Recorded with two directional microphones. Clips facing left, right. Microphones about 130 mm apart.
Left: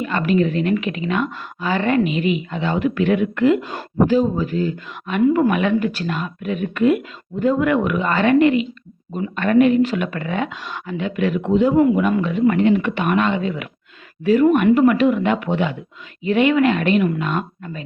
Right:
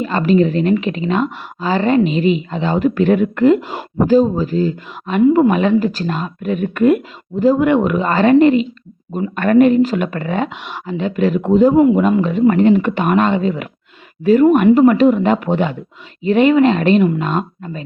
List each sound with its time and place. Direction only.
0.0 s speech: 35° right (ahead or behind); by 7.0 s 50° right (ahead or behind)
7.3 s speech: 30° right (ahead or behind)
9.3 s speech: 45° right (ahead or behind)
11.7 s speech: 25° right (ahead or behind)
14.8 s speech: 35° right (ahead or behind)